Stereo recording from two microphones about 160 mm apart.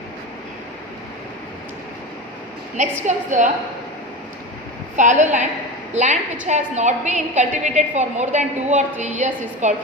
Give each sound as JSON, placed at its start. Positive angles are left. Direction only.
{"t": 2.7, "sound": "a woman's voice", "side_deg": -50}
{"t": 4.9, "sound": "a woman's voice", "side_deg": -50}